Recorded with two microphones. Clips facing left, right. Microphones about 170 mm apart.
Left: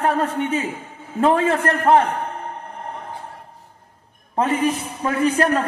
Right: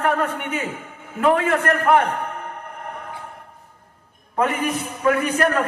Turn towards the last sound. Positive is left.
turn(degrees=30)  # may be behind; listen again after turning